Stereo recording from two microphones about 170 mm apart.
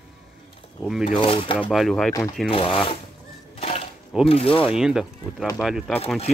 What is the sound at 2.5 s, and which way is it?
Speech, 30° left (ahead or behind).